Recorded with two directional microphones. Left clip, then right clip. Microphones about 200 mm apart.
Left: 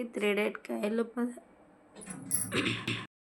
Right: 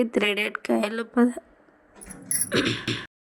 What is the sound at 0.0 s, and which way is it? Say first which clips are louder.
Speech: right 7 dB; 45° right (ahead or behind).